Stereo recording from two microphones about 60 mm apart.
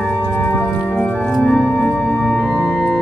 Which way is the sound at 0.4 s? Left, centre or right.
Left.